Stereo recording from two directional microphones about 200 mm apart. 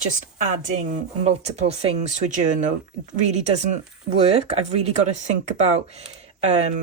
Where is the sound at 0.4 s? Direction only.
40° right (ahead or behind).